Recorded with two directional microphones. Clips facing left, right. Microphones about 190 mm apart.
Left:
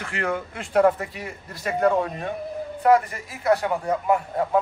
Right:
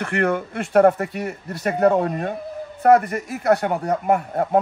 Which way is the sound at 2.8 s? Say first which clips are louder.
Right 4 dB; 60° right (ahead or behind).